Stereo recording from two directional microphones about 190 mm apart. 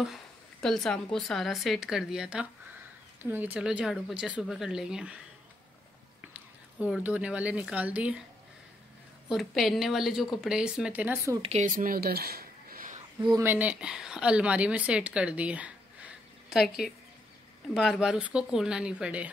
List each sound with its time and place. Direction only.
0.0 s speech: centre (ahead or behind)
6.3 s a woman's voice: 5° right (ahead or behind)
9.3 s speech: centre (ahead or behind)
11.4 s speech: 40° right (ahead or behind)
13.2 s a woman's voice: 15° right (ahead or behind)
16.4 s a sound: centre (ahead or behind)
17.7 s speech: centre (ahead or behind)